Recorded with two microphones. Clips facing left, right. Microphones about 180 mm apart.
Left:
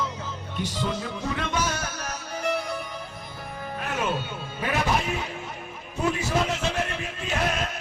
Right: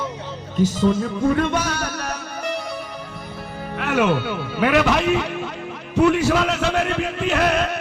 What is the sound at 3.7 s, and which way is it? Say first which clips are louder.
A man's voice: right 9 dB; 75° right (ahead or behind).